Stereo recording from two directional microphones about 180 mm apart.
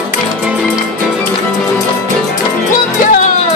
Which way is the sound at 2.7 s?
50° left (ahead or behind).